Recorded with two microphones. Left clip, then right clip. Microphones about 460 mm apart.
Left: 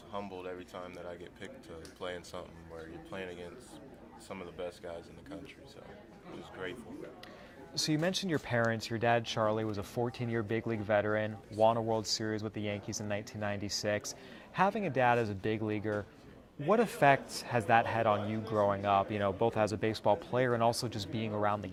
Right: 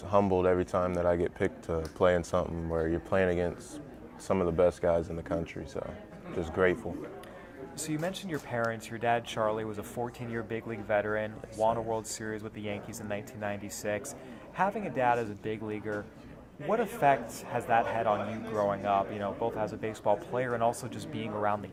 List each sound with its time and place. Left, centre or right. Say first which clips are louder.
0.1 s speech: right 16 dB; right
6.4 s speech: right 16 dB; right
8.0 s a man's voice: left 2 dB; left